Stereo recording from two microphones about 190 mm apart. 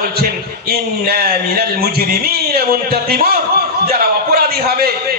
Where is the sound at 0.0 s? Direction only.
55° right (ahead or behind).